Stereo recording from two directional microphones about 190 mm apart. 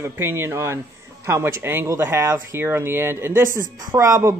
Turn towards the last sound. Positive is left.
turn(degrees=-15)  # may be behind; listen again after turning